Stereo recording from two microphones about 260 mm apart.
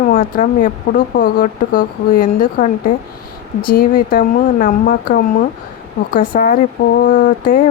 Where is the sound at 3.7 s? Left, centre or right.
Left.